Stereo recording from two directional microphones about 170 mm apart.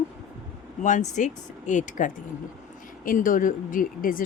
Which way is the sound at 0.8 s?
45° left (ahead or behind).